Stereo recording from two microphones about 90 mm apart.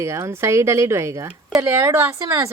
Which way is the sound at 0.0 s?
30° right (ahead or behind).